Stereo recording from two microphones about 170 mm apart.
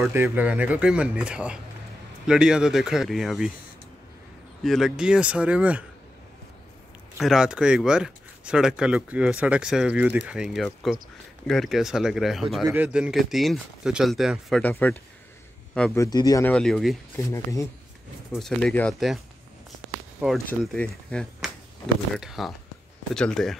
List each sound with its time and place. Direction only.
0.0 s speech: 15° right (ahead or behind)
4.6 s speech: centre (ahead or behind)
7.2 s speech: 5° right (ahead or behind)
14.6 s a man's voice: 10° left (ahead or behind)
16.0 s speech: 25° left (ahead or behind)
16.4 s speech: 5° left (ahead or behind)
17.2 s speech: 15° left (ahead or behind)
18.3 s speech: 5° left (ahead or behind)